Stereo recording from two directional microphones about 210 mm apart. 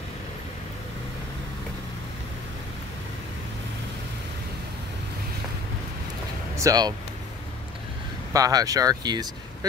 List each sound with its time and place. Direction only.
6.5 s speech: 15° right (ahead or behind)
8.3 s speech: 15° right (ahead or behind)